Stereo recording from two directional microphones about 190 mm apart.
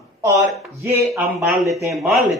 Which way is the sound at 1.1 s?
10° right (ahead or behind).